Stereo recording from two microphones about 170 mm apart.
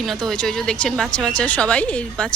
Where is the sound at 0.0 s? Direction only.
Centre (ahead or behind).